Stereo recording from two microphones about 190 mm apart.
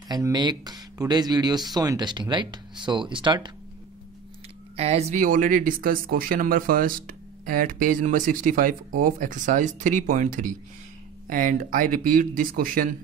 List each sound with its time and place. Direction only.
0.1 s speech: 20° right (ahead or behind)
4.7 s speech: 35° right (ahead or behind)